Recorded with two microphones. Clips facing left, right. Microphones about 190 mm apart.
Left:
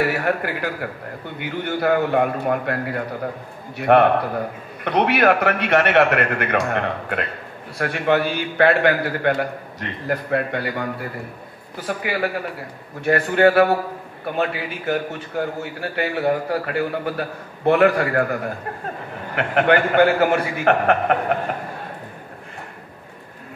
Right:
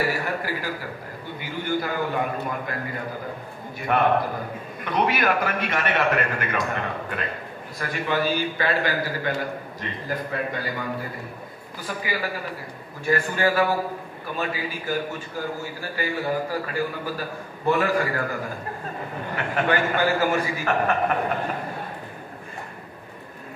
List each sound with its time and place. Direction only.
0.0 s a man's voice: 65° left (ahead or behind)